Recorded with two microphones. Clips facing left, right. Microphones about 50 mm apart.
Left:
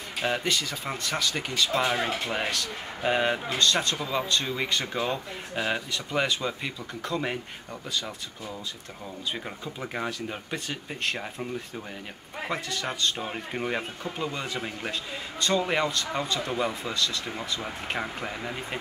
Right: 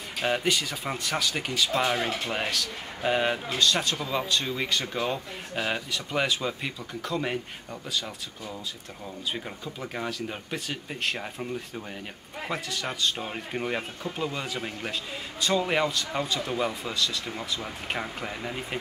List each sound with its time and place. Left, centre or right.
0.2 s speech: centre
9.8 s speech: centre
10.2 s speech: centre
12.4 s speech: centre
17.3 s speech: centre